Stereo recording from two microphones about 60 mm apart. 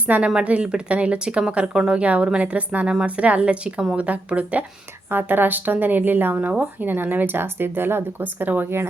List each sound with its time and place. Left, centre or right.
0.1 s speech: right